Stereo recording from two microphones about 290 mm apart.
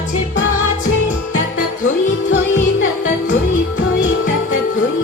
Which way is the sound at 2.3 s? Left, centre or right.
Left.